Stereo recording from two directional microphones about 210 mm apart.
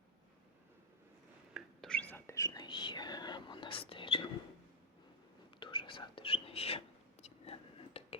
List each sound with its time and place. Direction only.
1.5 s whispering: 5° left (ahead or behind); by 4.3 s 25° left (ahead or behind)
5.5 s whispering: 25° left (ahead or behind)